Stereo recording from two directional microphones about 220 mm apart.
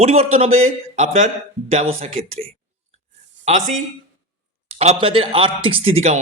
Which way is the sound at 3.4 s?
35° right (ahead or behind).